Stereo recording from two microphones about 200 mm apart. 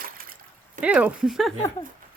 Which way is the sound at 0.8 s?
5° right (ahead or behind).